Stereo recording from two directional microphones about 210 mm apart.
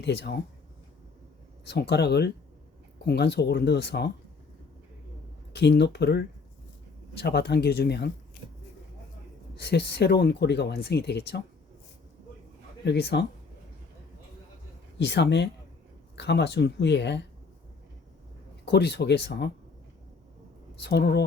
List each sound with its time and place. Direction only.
0.0 s speech: 55° left (ahead or behind)
1.6 s speech: 50° left (ahead or behind)
5.5 s speech: 55° left (ahead or behind)
9.6 s speech: 50° left (ahead or behind)
12.8 s speech: 50° left (ahead or behind)
14.9 s speech: 55° left (ahead or behind)
18.6 s speech: 50° left (ahead or behind)
20.8 s speech: 50° left (ahead or behind)